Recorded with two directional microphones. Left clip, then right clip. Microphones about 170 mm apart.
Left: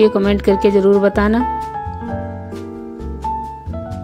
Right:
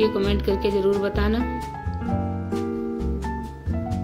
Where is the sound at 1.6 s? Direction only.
Centre (ahead or behind).